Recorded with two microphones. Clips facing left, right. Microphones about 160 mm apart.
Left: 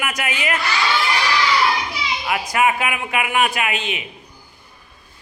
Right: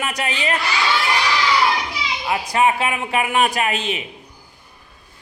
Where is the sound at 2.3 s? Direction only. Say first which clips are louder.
Right 1 dB; 30° right (ahead or behind).